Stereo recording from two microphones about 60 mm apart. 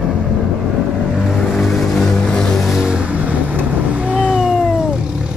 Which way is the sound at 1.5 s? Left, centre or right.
Centre.